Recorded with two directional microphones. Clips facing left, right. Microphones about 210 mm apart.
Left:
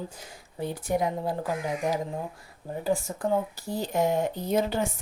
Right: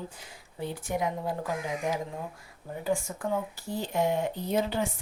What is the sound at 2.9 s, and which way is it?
Speech, 35° left (ahead or behind).